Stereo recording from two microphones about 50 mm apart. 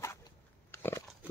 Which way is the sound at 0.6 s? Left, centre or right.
Left.